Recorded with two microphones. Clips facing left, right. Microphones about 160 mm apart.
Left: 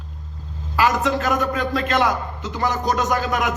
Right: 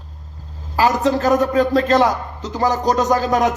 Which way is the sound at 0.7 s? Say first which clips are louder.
Right 3 dB; 35° right (ahead or behind).